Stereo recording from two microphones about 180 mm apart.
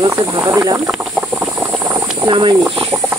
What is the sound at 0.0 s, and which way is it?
Speech, 20° right (ahead or behind).